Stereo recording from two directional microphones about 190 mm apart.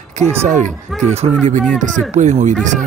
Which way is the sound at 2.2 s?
40° right (ahead or behind).